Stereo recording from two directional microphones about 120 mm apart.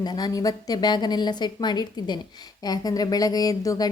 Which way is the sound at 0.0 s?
35° left (ahead or behind).